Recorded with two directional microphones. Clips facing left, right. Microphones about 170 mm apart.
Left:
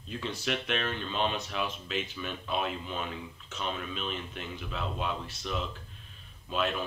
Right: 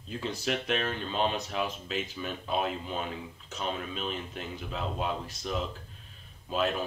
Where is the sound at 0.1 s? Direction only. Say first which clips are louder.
Right 1 dB; 35° right (ahead or behind).